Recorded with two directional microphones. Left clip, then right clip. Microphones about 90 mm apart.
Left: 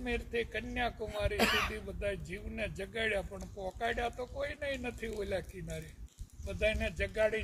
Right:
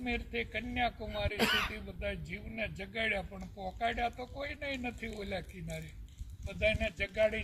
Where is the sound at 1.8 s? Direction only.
30° left (ahead or behind).